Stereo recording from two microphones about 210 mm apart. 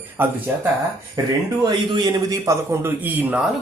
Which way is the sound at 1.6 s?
20° right (ahead or behind).